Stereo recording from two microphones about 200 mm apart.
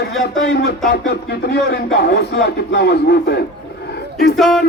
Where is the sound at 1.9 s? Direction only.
55° left (ahead or behind).